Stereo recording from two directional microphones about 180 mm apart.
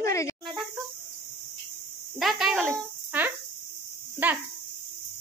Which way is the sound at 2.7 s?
10° right (ahead or behind).